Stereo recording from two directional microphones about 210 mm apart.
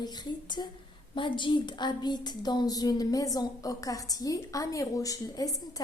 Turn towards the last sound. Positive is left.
turn(degrees=15)  # may be behind; listen again after turning